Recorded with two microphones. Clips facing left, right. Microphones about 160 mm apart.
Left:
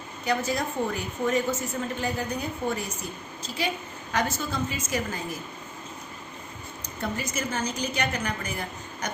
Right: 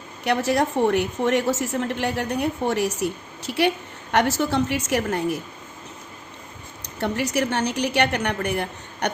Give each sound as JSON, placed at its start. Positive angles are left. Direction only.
{"t": 0.3, "sound": "a woman's voice", "side_deg": -75}
{"t": 6.8, "sound": "a woman's voice", "side_deg": -70}